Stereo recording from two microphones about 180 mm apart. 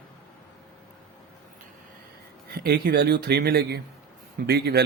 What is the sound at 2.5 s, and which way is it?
Speech, 60° right (ahead or behind).